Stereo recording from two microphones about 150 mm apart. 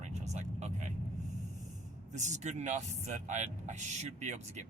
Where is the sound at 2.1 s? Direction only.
50° right (ahead or behind).